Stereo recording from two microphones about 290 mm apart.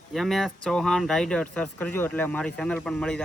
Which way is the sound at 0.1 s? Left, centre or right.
Centre.